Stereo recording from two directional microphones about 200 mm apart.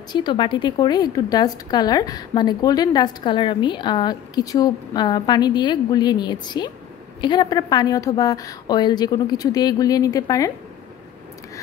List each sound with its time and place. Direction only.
0.1 s a woman's voice: 25° left (ahead or behind)